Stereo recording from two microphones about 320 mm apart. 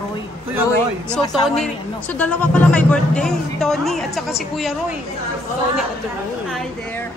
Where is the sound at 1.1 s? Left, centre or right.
Centre.